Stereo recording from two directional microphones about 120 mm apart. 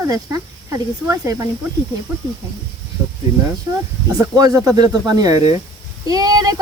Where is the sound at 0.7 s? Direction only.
25° right (ahead or behind).